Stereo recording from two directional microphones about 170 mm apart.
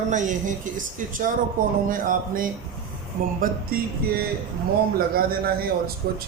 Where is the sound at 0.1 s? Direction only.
45° right (ahead or behind).